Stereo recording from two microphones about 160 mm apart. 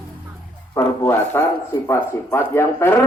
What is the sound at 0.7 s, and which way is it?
Speech, 15° left (ahead or behind).